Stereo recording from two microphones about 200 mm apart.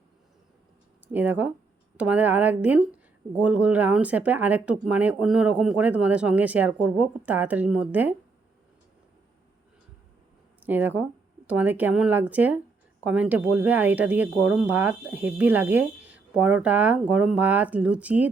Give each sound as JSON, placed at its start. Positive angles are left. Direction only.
{"t": 1.0, "sound": "speech", "side_deg": -10}
{"t": 10.6, "sound": "speech", "side_deg": -10}